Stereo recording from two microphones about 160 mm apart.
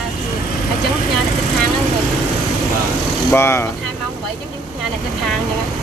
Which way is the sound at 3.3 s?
15° left (ahead or behind).